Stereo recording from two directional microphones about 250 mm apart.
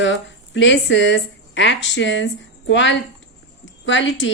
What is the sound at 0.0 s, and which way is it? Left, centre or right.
A woman's voice, left.